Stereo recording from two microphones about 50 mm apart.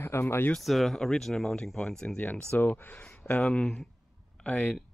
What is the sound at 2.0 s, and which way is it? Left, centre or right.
Speech, left.